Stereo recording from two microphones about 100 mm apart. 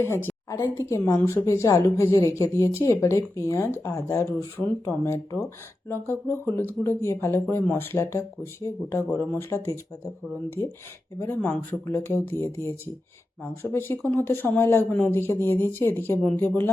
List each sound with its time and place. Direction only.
0.0 s a woman's voice: 20° left (ahead or behind)
11.2 s speech: 20° left (ahead or behind)